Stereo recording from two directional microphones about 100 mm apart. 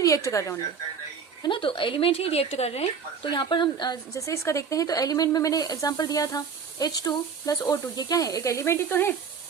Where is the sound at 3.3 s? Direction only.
50° left (ahead or behind).